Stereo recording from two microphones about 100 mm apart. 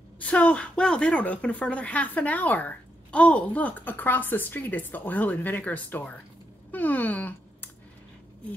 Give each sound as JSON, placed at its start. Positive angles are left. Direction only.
{"t": 0.2, "sound": "a woman's voice", "side_deg": 15}